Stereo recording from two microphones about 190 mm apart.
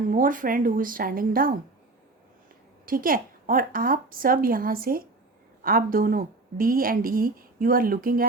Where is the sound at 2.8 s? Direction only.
50° right (ahead or behind).